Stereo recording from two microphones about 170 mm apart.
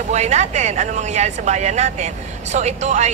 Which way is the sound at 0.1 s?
40° right (ahead or behind).